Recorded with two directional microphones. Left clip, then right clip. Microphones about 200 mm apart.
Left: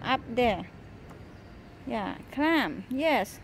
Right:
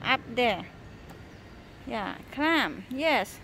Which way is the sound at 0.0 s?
25° left (ahead or behind).